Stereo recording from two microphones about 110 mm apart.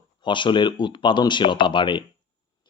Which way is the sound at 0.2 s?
45° left (ahead or behind).